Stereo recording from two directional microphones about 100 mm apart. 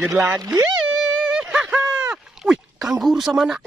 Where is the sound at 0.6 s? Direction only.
10° right (ahead or behind).